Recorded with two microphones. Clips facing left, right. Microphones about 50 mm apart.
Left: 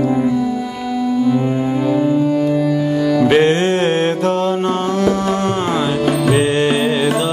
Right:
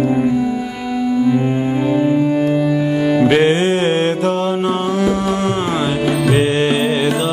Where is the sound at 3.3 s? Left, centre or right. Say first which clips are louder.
Even; centre.